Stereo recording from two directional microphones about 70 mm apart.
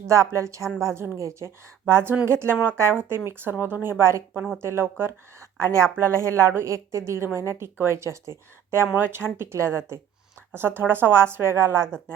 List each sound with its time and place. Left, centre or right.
0.1 s a woman's voice: right